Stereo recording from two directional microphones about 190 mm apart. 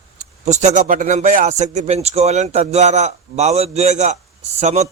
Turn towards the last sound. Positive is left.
turn(degrees=-35)  # may be behind; listen again after turning